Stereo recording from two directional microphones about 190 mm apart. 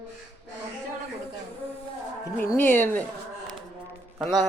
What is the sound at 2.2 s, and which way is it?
Speech, 15° left (ahead or behind).